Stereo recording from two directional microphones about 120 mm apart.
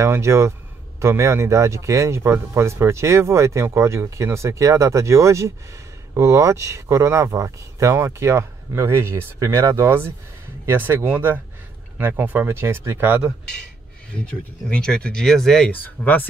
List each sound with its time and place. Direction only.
0.0 s speech: 25° right (ahead or behind)
14.1 s speech: 10° left (ahead or behind)